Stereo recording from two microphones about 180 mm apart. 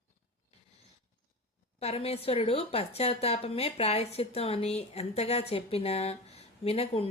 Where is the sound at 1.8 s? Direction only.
35° left (ahead or behind).